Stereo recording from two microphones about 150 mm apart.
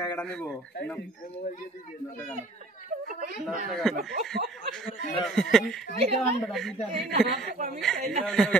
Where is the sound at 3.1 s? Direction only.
65° right (ahead or behind).